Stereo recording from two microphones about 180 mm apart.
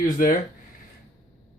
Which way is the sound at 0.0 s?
50° left (ahead or behind).